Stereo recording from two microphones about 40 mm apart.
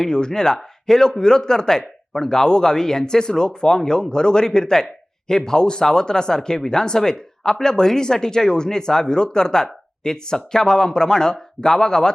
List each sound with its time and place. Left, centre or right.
0.0 s speech: centre